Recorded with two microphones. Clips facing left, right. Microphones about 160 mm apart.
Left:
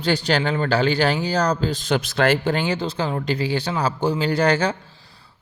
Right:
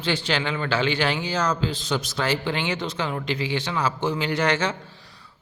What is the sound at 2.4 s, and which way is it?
A man's voice, 40° left (ahead or behind).